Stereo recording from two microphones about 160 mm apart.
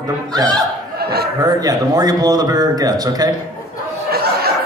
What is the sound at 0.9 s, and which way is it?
Chuckle, 80° right.